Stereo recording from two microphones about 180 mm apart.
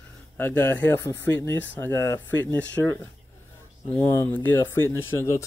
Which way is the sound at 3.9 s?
10° left (ahead or behind).